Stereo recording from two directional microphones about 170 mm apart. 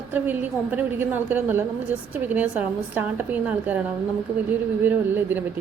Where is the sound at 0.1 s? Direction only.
10° right (ahead or behind).